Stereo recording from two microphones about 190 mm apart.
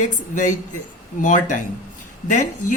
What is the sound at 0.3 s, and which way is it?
A woman's voice, 45° left (ahead or behind).